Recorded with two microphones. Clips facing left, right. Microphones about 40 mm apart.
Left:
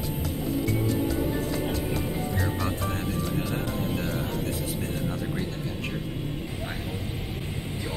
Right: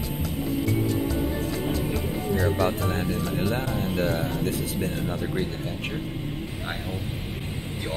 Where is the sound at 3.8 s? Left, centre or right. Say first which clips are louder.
Right 4 dB; right.